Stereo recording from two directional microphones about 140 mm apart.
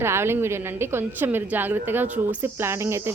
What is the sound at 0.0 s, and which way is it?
A woman's voice, 20° right (ahead or behind).